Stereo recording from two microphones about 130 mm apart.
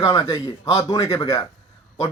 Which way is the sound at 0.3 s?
25° left (ahead or behind).